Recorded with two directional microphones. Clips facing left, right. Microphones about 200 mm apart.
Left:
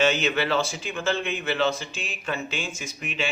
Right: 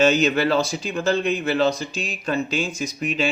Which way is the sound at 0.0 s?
40° right (ahead or behind).